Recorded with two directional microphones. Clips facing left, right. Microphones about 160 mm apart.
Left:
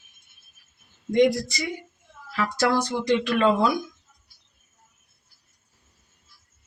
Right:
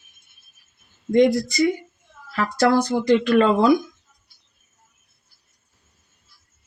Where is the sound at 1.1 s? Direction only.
50° right (ahead or behind).